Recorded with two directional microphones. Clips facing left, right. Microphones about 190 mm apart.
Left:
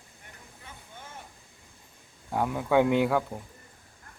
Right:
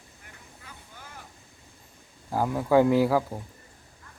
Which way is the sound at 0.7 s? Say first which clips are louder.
Left 2 dB; 25° left (ahead or behind).